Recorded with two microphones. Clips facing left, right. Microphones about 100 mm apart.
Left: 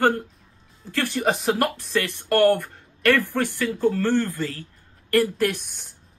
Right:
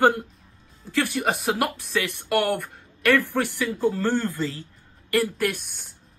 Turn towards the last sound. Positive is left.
turn(degrees=0)  # may be behind; listen again after turning